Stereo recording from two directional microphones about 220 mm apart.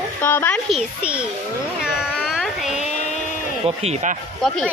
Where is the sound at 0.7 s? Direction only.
5° right (ahead or behind).